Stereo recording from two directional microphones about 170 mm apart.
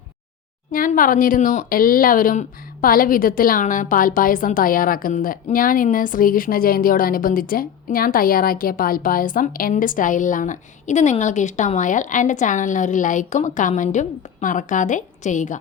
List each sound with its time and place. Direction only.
0.7 s speech: 55° left (ahead or behind)